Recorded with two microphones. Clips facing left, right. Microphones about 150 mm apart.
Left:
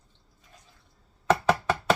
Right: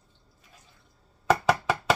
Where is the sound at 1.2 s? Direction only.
5° right (ahead or behind).